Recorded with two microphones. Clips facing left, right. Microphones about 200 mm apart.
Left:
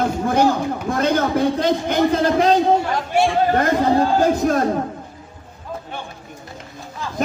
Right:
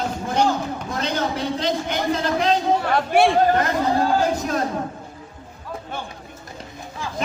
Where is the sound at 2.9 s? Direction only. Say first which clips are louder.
Right 2 dB; 60° right (ahead or behind).